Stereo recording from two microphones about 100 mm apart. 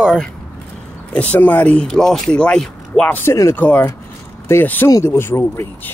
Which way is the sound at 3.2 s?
30° left (ahead or behind).